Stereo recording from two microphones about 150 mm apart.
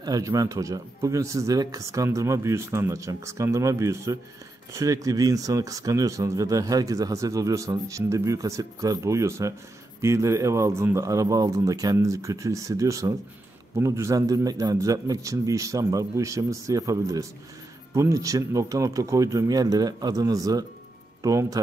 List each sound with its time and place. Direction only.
0.0 s speech: 25° right (ahead or behind)